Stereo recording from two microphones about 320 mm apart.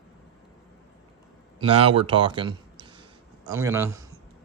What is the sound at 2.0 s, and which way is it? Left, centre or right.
Speech, centre.